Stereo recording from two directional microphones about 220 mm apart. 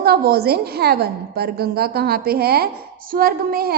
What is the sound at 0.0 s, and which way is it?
A woman's voice, 45° right (ahead or behind).